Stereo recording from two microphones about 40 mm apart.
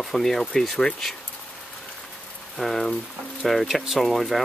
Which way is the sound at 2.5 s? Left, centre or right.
Centre.